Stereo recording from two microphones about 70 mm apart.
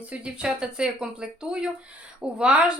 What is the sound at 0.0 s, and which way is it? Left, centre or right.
Speech, centre.